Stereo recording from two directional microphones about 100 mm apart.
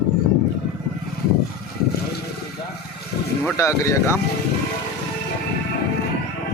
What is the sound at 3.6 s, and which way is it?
Speech, 30° left (ahead or behind).